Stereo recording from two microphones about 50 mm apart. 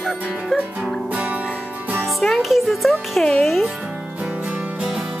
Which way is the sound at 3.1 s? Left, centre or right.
Centre.